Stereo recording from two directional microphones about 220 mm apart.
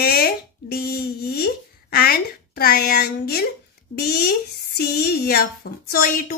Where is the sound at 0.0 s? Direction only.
45° left (ahead or behind).